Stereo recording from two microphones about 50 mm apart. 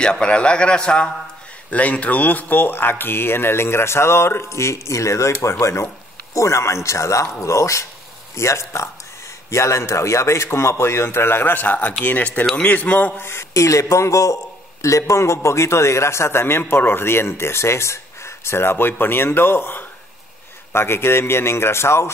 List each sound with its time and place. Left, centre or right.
0.0 s a man's voice: centre
1.7 s speech: left
4.5 s speech: left
8.4 s a man's voice: left
13.2 s a man's voice: left